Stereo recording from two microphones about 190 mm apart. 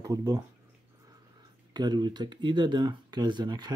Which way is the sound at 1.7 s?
20° right (ahead or behind).